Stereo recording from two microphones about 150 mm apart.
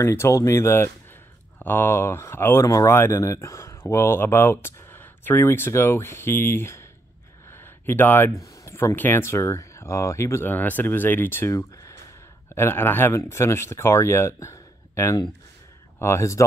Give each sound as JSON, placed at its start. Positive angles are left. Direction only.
{"t": 0.0, "sound": "speech", "side_deg": 15}
{"t": 7.5, "sound": "a sound", "side_deg": 15}
{"t": 8.6, "sound": "speech", "side_deg": 20}